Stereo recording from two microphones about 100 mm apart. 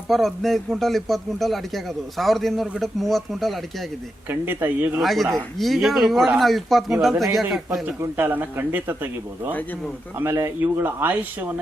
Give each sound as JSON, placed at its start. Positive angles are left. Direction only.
{"t": 0.1, "sound": "a man's voice", "side_deg": 0}
{"t": 4.3, "sound": "a man's voice", "side_deg": -20}
{"t": 4.9, "sound": "a man's voice", "side_deg": 0}
{"t": 8.1, "sound": "a man's voice", "side_deg": -20}